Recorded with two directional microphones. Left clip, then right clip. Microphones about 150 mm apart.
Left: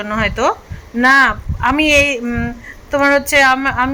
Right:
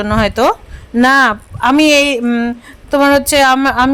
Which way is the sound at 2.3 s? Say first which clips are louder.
Right 5 dB; 45° right (ahead or behind).